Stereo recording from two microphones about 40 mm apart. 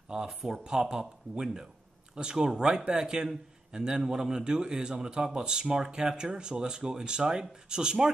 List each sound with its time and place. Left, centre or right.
0.1 s speech: right